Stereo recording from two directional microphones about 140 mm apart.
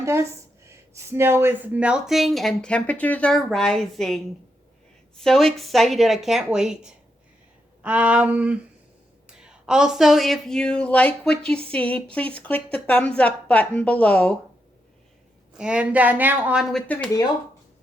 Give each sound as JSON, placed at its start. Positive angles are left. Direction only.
{"t": 0.0, "sound": "speech", "side_deg": -20}
{"t": 7.8, "sound": "a woman's voice", "side_deg": -10}
{"t": 15.5, "sound": "a woman's voice", "side_deg": -5}